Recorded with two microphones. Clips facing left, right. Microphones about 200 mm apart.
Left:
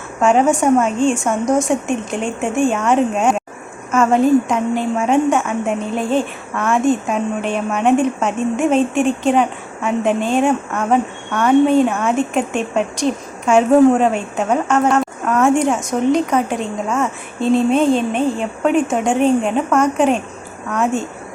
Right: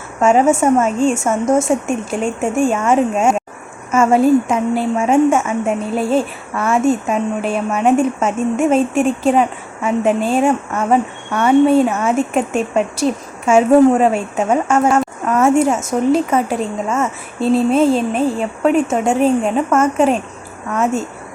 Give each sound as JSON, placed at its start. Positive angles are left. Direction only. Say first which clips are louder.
{"t": 0.2, "sound": "a woman's voice", "louder": "right 1 dB", "side_deg": -5}
{"t": 0.9, "sound": "a woman's voice", "louder": "right 1 dB", "side_deg": -40}
{"t": 1.2, "sound": "a woman's voice", "louder": "right 2 dB", "side_deg": -5}